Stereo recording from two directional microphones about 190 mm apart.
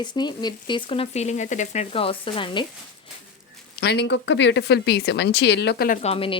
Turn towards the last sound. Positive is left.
turn(degrees=30)  # may be behind; listen again after turning